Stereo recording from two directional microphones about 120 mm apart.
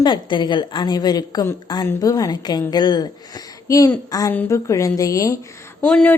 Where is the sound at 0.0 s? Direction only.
40° left (ahead or behind).